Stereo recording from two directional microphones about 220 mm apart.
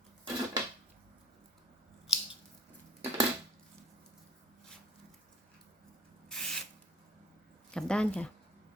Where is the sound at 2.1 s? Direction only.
Centre (ahead or behind).